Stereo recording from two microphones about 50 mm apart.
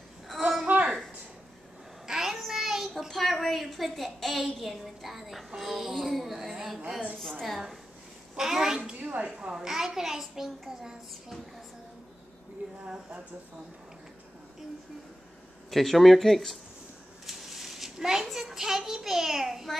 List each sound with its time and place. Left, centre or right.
0.3 s a sound: centre
2.0 s child singing: centre
3.1 s a woman's voice: centre
7.2 s a woman's voice: centre
8.4 s a child's voice: centre; by 9.5 s right
9.5 s a child's voice: centre
15.7 s a woman's voice: centre
17.3 s a sound: centre